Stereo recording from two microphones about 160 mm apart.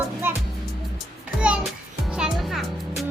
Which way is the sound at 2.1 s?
5° right (ahead or behind).